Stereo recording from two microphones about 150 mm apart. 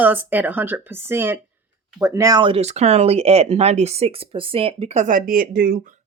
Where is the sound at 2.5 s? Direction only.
45° right (ahead or behind).